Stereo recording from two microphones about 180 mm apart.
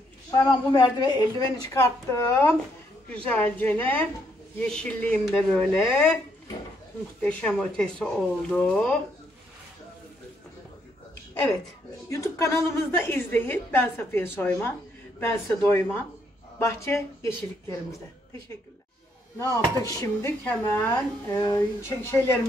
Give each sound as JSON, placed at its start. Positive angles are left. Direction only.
{"t": 0.5, "sound": "a man's voice", "side_deg": 25}
{"t": 12.1, "sound": "a woman's voice", "side_deg": 15}
{"t": 19.3, "sound": "a woman's voice", "side_deg": 15}